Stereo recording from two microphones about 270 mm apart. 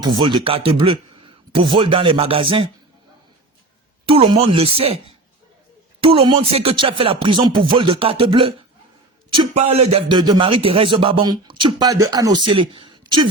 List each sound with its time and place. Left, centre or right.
0.2 s a man's voice: centre
4.0 s a man's voice: centre
9.6 s a sound: right
9.9 s speech: centre